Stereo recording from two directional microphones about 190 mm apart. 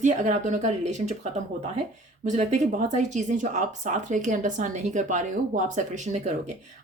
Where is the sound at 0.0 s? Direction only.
40° right (ahead or behind).